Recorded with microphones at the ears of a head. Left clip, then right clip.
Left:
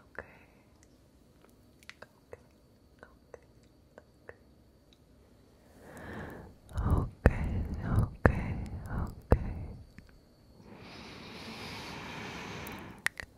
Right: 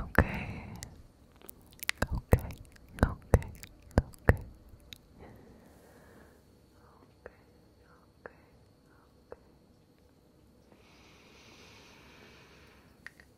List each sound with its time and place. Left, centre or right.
0.0 s whispering: right
5.9 s a sound: left
10.7 s vehicle: left